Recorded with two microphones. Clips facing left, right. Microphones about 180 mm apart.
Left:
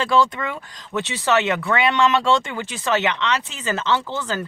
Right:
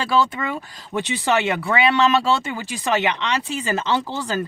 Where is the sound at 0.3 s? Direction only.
15° right (ahead or behind).